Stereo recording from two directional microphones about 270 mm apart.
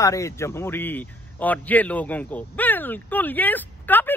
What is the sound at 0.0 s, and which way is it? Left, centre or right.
A man's voice, centre.